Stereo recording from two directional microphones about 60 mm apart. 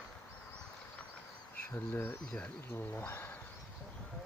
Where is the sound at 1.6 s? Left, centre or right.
Left.